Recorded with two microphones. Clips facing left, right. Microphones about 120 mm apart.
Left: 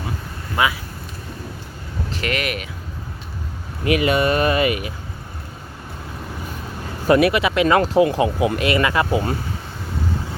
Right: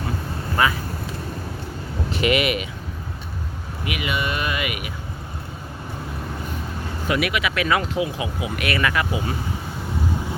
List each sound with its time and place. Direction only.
0.6 s speech: 10° left (ahead or behind)
2.2 s speech: 5° right (ahead or behind)
3.8 s speech: 40° left (ahead or behind)
7.1 s speech: 35° left (ahead or behind)
7.8 s speech: 60° left (ahead or behind)
8.1 s speech: 50° left (ahead or behind)
8.5 s speech: 25° left (ahead or behind)